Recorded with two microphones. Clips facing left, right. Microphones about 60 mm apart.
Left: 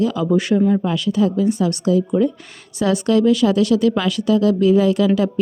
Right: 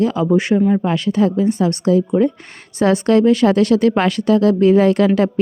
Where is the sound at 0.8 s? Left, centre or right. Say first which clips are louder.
Right 2 dB; right.